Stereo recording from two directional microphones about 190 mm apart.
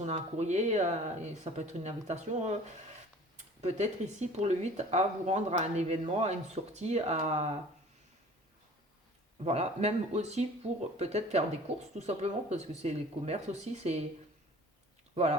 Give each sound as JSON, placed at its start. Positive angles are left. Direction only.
{"t": 0.0, "sound": "speech", "side_deg": -35}
{"t": 9.4, "sound": "speech", "side_deg": -35}
{"t": 15.1, "sound": "speech", "side_deg": -35}